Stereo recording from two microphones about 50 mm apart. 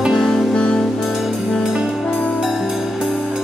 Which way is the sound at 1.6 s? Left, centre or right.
Centre.